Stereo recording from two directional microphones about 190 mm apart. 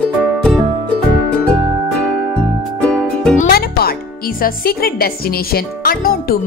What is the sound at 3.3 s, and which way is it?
Speech, 50° left (ahead or behind).